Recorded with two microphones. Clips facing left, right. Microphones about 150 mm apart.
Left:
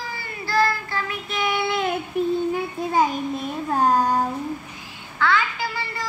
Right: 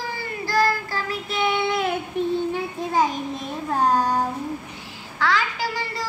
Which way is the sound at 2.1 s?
5° left (ahead or behind).